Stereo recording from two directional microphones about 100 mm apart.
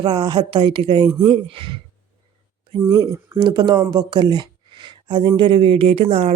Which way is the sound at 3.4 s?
45° right (ahead or behind).